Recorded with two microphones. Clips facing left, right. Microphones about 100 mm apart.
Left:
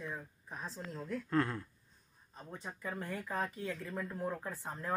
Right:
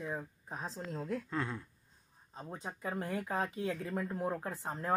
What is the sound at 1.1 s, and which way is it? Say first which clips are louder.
Speech: left 8 dB; 10° right (ahead or behind).